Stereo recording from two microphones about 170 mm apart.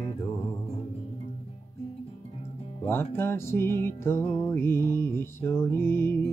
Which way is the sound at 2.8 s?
15° left (ahead or behind).